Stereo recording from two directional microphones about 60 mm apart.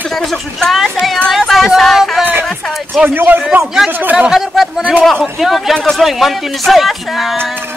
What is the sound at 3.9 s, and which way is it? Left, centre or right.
Speech, right.